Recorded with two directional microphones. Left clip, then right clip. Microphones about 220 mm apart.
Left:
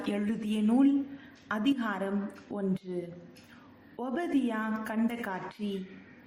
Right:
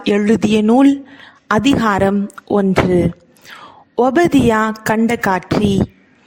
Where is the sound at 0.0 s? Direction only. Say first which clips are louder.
Right 19 dB; 45° right (ahead or behind).